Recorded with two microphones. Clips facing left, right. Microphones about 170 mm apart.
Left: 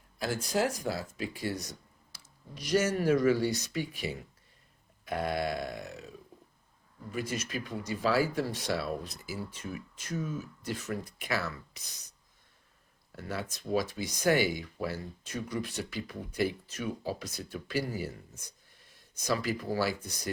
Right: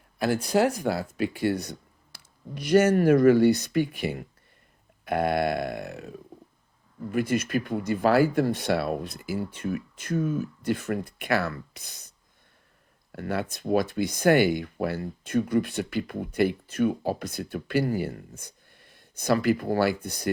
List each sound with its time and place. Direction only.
0.2 s speech: 60° right (ahead or behind)